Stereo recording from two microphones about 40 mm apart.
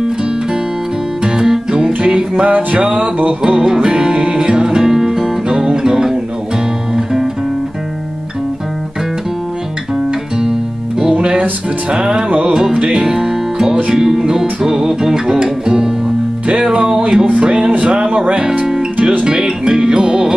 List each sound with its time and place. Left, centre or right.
1.2 s music: centre
11.0 s music: centre